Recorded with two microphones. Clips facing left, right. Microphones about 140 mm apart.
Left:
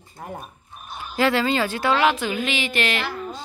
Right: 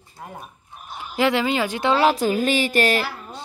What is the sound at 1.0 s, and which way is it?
Speech, 15° right (ahead or behind).